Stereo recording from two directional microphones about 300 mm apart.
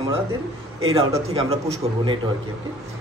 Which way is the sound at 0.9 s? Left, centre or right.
Centre.